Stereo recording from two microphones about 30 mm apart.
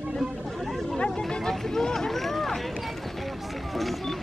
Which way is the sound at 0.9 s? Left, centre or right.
Left.